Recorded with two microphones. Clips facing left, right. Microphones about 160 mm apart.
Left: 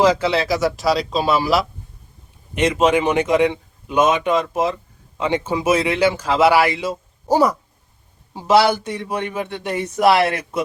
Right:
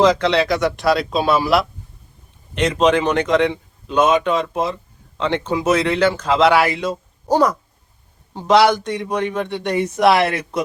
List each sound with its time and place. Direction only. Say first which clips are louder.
0.0 s a man's voice: right 1 dB; 5° left (ahead or behind)